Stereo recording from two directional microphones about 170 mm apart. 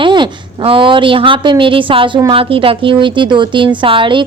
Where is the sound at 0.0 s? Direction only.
30° right (ahead or behind).